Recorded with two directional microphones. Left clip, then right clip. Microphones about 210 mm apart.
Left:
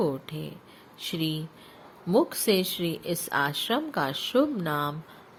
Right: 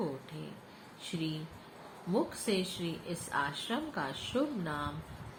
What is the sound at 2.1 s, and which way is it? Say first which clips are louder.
Speech: left 10 dB; 50° left (ahead or behind).